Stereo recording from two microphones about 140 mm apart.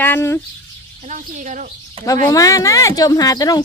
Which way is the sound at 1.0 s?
60° right (ahead or behind).